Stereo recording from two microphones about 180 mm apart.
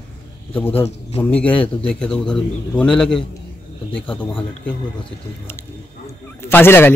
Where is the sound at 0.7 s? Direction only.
35° left (ahead or behind).